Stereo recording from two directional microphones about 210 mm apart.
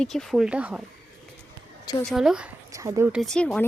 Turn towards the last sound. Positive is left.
turn(degrees=5)  # may be behind; listen again after turning